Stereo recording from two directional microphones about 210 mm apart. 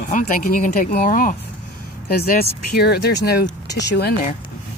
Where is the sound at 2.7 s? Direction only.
50° left (ahead or behind).